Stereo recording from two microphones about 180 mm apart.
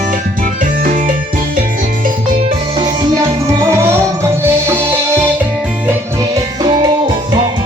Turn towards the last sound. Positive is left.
turn(degrees=-25)  # may be behind; listen again after turning